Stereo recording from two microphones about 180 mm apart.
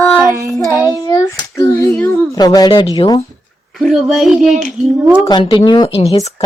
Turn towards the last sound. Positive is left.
turn(degrees=35)  # may be behind; listen again after turning